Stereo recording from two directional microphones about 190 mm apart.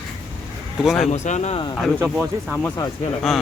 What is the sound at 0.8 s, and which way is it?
Speech, centre (ahead or behind).